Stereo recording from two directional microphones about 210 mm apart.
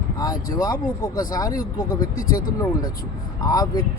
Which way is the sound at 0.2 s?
20° left (ahead or behind).